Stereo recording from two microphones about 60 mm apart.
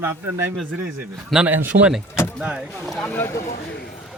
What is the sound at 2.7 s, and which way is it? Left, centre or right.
Speech, centre.